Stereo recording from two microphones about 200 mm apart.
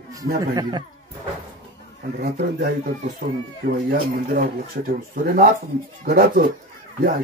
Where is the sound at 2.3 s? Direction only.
45° right (ahead or behind).